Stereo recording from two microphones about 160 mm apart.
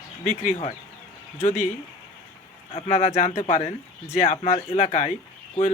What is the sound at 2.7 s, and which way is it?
Speech, 40° left (ahead or behind).